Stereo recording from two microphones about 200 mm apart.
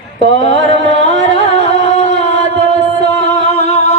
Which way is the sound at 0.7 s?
30° left (ahead or behind).